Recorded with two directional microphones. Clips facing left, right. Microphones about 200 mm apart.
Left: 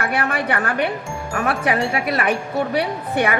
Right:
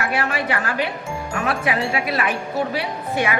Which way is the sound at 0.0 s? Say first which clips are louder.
Left 1 dB; 55° left (ahead or behind).